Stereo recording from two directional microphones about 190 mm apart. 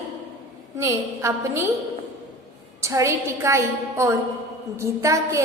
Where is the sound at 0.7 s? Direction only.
15° right (ahead or behind).